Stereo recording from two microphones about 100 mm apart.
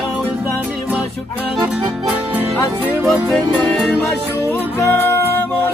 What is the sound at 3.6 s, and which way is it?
Music, 5° left (ahead or behind).